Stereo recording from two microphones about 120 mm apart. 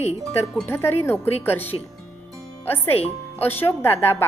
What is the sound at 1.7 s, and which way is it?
Speech, 45° left (ahead or behind).